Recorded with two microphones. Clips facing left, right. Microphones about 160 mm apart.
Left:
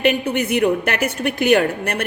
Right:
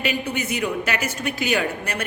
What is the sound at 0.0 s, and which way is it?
A woman's voice, 60° left (ahead or behind).